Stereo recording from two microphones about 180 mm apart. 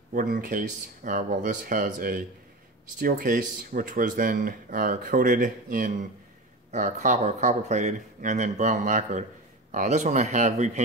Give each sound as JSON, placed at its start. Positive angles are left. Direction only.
{"t": 0.1, "sound": "speech", "side_deg": -50}